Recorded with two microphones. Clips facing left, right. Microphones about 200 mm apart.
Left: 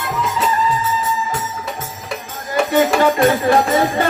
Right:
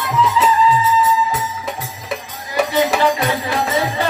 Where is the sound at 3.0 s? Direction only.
50° left (ahead or behind).